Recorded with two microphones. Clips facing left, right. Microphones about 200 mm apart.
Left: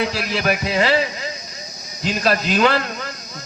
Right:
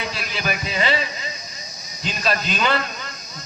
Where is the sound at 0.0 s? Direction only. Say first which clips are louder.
Left 7 dB; 65° left (ahead or behind).